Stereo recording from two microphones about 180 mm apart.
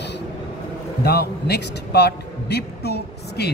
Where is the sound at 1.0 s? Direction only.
65° left (ahead or behind).